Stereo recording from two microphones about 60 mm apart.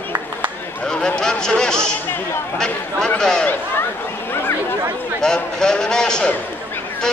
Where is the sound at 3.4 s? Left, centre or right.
Left.